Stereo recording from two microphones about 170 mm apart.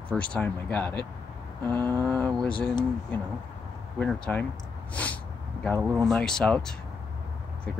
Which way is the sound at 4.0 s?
10° left (ahead or behind).